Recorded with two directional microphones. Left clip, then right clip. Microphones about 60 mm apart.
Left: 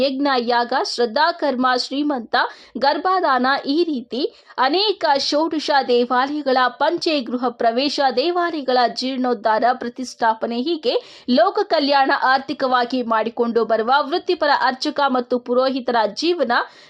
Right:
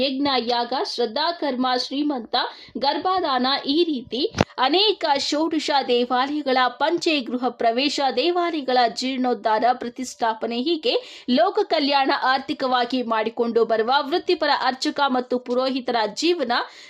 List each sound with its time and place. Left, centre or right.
0.2 s a woman's voice: left